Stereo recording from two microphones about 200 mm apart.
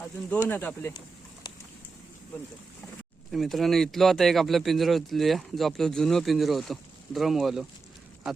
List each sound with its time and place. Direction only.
0.4 s speech: 10° left (ahead or behind)
3.3 s speech: centre (ahead or behind)